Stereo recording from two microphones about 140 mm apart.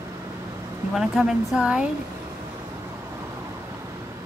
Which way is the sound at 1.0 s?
5° right (ahead or behind).